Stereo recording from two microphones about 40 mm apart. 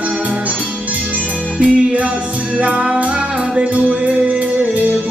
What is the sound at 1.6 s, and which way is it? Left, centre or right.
Music, right.